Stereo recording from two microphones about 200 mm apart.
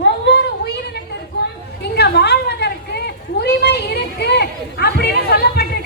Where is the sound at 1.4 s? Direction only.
60° left (ahead or behind).